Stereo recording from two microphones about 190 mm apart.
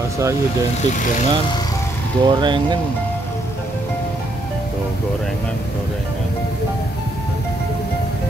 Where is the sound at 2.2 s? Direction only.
25° right (ahead or behind).